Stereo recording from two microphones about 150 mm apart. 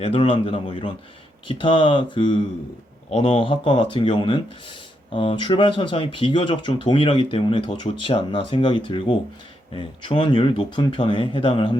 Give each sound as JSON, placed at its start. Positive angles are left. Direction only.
{"t": 0.0, "sound": "speech", "side_deg": 35}